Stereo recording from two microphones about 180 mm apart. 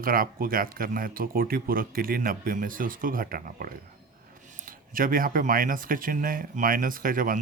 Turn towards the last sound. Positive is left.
turn(degrees=-50)  # may be behind; listen again after turning